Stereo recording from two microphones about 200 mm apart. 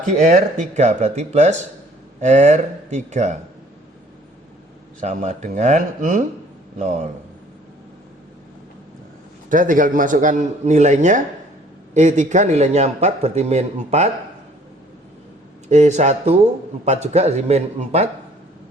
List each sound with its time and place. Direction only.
0.2 s a man's voice: 35° right (ahead or behind)
4.9 s a man's voice: 35° right (ahead or behind)
9.5 s a man's voice: 40° right (ahead or behind)
15.7 s a man's voice: 35° right (ahead or behind)